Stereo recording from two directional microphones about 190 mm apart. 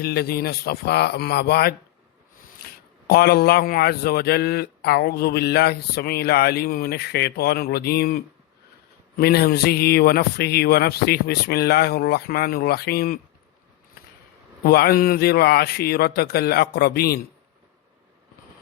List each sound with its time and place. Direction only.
0.0 s a man's voice: 55° left (ahead or behind)
3.1 s a man's voice: 55° left (ahead or behind)
14.6 s a man's voice: 55° left (ahead or behind)